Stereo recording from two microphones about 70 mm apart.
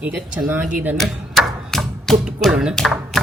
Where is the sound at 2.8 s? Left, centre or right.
Centre.